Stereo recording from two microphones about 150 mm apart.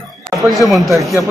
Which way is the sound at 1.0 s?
20° right (ahead or behind).